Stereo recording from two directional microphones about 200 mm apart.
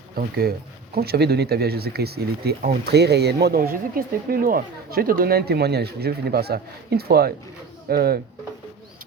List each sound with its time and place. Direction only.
0.2 s speech: 50° right (ahead or behind)